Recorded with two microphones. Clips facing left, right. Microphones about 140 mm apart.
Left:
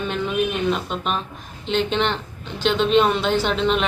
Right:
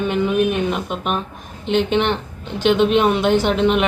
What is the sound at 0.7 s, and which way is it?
A woman's voice, 10° right (ahead or behind).